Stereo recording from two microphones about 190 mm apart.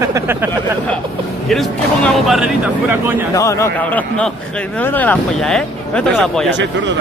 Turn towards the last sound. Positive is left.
turn(degrees=-70)  # may be behind; listen again after turning